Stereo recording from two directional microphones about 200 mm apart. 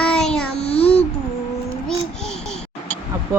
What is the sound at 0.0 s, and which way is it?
Child singing, 5° left (ahead or behind).